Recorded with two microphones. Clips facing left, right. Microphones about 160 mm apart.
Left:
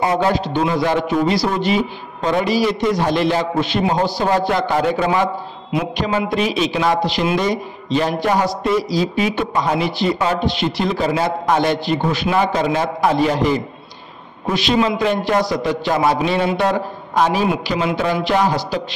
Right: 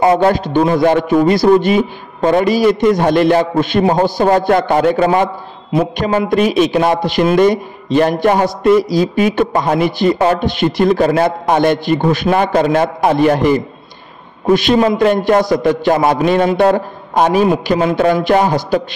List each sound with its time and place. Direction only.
0.0 s a man's voice: 50° right (ahead or behind)